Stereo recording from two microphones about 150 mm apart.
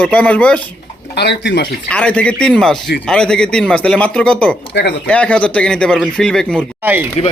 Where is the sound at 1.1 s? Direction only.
90° left.